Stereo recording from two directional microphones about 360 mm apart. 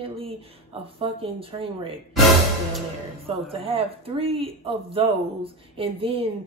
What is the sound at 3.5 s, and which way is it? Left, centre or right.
Speech, centre.